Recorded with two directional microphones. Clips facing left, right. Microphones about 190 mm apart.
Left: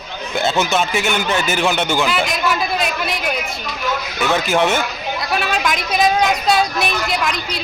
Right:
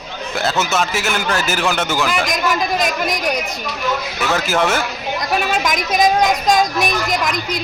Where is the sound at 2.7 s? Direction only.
45° right (ahead or behind).